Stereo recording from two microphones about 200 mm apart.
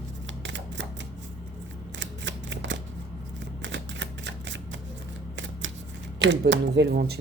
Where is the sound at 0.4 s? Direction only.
65° right (ahead or behind).